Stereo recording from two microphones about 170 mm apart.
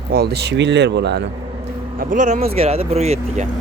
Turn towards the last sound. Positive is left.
turn(degrees=-40)  # may be behind; listen again after turning